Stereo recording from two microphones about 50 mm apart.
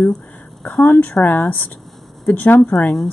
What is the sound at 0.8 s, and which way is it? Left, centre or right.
Speech, left.